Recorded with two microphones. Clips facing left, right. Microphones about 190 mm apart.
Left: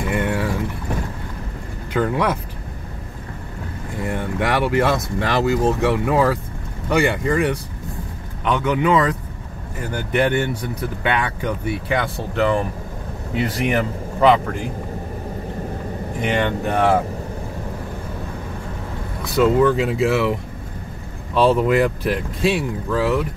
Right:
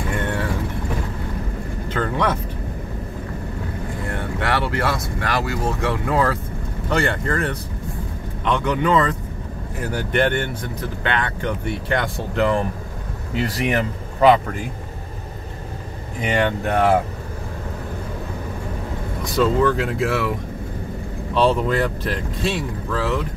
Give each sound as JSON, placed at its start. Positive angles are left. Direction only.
{"t": 0.2, "sound": "vehicle", "side_deg": 10}
{"t": 2.0, "sound": "speech", "side_deg": 10}
{"t": 4.1, "sound": "speech", "side_deg": 15}
{"t": 16.2, "sound": "speech", "side_deg": -5}
{"t": 19.3, "sound": "speech", "side_deg": 5}
{"t": 21.5, "sound": "speech", "side_deg": 5}